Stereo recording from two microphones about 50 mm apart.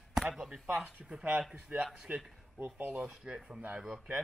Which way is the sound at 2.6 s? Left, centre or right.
Right.